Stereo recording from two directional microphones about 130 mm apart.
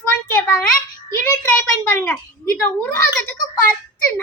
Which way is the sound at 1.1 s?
20° left (ahead or behind).